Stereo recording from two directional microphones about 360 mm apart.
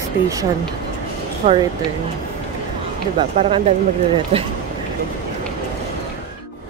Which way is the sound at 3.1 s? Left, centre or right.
Centre.